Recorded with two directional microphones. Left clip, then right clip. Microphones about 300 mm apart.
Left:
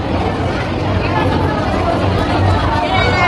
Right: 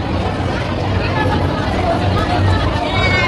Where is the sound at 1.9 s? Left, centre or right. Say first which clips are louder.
Left 1 dB; centre.